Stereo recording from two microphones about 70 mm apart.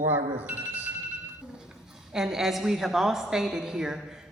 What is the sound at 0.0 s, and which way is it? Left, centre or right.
Speech, right.